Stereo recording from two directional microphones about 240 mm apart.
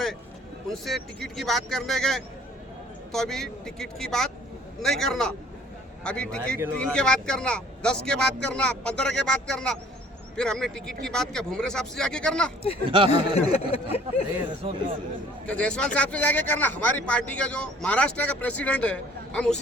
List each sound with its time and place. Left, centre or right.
0.9 s speech: centre
12.9 s speech: right
13.3 s speech: left
14.6 s speech: right
15.4 s speech: centre